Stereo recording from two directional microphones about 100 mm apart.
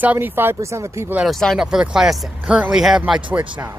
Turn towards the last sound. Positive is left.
turn(degrees=-15)  # may be behind; listen again after turning